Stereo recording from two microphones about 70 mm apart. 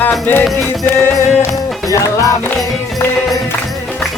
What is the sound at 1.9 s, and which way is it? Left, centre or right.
Music, left.